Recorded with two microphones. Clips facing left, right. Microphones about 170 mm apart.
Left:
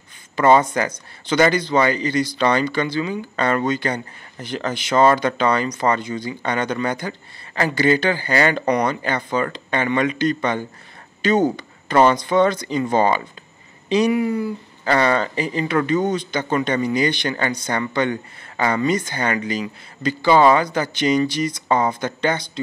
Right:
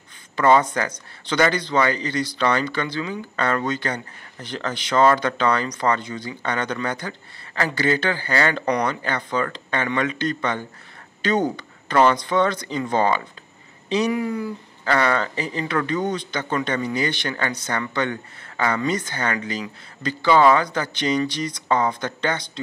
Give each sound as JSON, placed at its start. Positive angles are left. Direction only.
{"t": 0.6, "sound": "speech", "side_deg": 10}
{"t": 14.9, "sound": "speech", "side_deg": 20}